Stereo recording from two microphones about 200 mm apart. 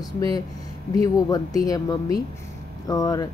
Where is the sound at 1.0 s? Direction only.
20° left (ahead or behind).